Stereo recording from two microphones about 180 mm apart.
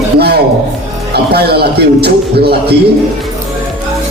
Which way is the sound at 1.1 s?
65° right (ahead or behind).